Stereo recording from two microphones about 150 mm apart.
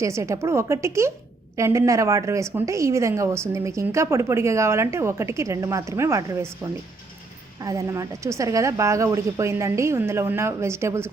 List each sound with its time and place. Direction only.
0.0 s a woman's voice: 20° right (ahead or behind)